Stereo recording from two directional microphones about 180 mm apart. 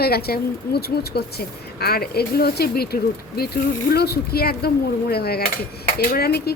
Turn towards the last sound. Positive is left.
turn(degrees=60)  # may be behind; listen again after turning